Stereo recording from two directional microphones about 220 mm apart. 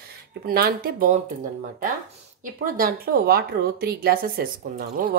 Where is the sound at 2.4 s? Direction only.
40° right (ahead or behind).